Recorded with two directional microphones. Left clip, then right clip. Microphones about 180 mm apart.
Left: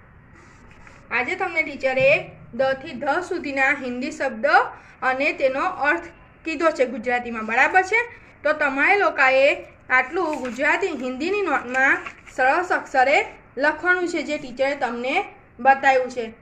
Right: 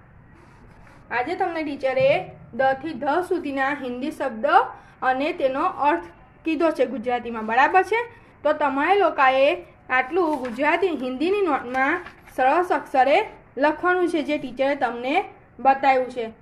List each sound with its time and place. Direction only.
1.5 s a woman's voice: 45° right (ahead or behind); by 16.0 s 30° right (ahead or behind)